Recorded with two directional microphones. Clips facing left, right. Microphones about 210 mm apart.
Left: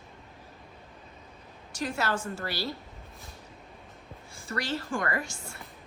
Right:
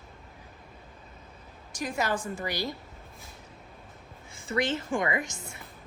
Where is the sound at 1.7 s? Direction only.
15° right (ahead or behind).